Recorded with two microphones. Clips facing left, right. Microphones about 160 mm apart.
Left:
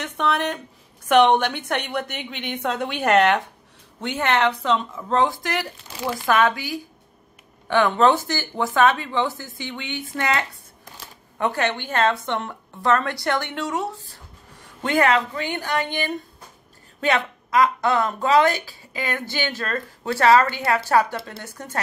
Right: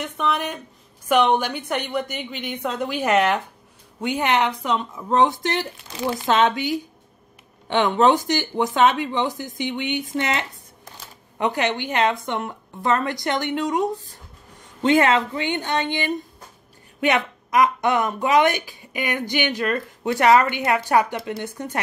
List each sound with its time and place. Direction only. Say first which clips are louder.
0.0 s a woman's voice: left 1 dB; centre (ahead or behind); by 21.8 s 20° right (ahead or behind)